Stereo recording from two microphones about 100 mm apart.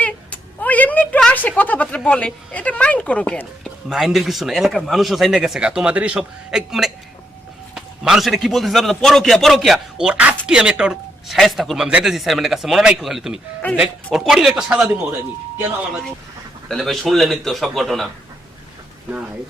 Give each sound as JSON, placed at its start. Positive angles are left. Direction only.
{"t": 0.0, "sound": "a sound", "side_deg": 15}
{"t": 1.2, "sound": "speech", "side_deg": 15}
{"t": 3.8, "sound": "a man's voice", "side_deg": -5}
{"t": 16.6, "sound": "a man's voice", "side_deg": 0}